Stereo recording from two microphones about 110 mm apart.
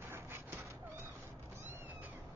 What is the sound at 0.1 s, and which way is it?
Cat, 20° right (ahead or behind).